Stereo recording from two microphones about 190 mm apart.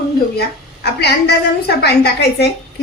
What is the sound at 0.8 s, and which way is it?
A woman's voice, 60° left (ahead or behind).